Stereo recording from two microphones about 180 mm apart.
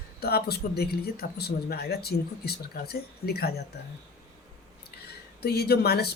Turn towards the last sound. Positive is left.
turn(degrees=60)  # may be behind; listen again after turning